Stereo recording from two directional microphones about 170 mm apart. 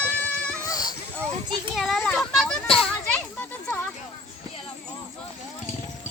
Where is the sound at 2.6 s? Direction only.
35° left (ahead or behind).